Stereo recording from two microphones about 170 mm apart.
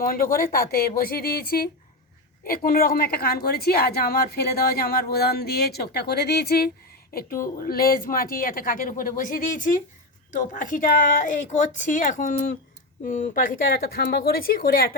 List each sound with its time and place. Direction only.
0.0 s a woman's voice: 55° left (ahead or behind)